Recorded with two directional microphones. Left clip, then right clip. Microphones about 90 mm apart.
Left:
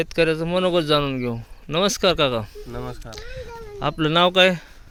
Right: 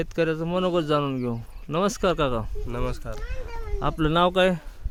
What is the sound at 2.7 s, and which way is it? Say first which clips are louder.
Speech: right 4 dB; 45° right (ahead or behind).